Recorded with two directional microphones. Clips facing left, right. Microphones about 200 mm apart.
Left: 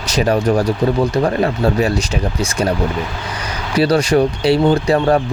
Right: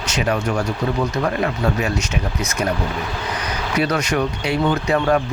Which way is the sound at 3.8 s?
30° left (ahead or behind).